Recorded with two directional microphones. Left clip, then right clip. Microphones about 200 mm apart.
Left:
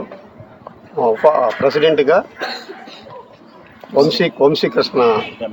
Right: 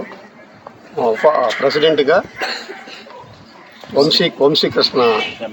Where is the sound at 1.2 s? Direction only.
10° left (ahead or behind).